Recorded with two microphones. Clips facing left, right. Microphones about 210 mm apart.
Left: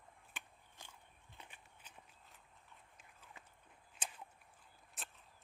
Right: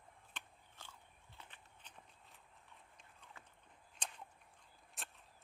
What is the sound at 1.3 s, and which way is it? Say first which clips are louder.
Walk: left 1 dB; 10° left (ahead or behind).